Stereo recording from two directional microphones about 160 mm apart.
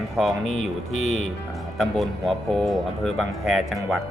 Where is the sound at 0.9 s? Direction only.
45° left (ahead or behind).